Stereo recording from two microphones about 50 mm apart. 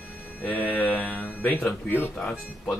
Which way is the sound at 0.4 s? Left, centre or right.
Left.